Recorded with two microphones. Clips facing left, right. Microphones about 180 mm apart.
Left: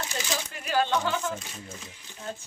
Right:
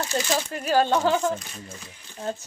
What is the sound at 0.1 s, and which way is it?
Speech, 40° right (ahead or behind).